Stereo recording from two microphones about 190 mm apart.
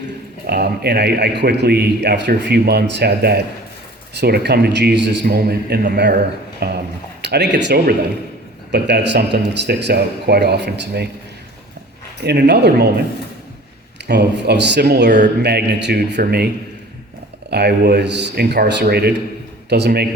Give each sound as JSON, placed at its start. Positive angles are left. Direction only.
{"t": 0.4, "sound": "a man's voice", "side_deg": -55}
{"t": 12.2, "sound": "a man's voice", "side_deg": -60}
{"t": 14.1, "sound": "a man's voice", "side_deg": -60}
{"t": 17.5, "sound": "a man's voice", "side_deg": -60}